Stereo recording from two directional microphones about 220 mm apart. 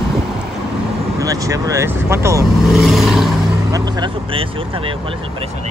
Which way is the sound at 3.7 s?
20° right (ahead or behind).